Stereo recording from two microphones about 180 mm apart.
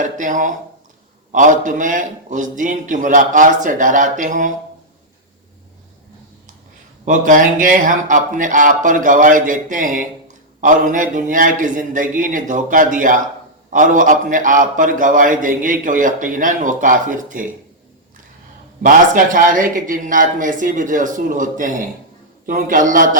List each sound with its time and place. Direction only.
0.0 s a man's voice: 45° right (ahead or behind)
7.0 s a man's voice: 45° right (ahead or behind)
18.8 s a man's voice: 50° right (ahead or behind)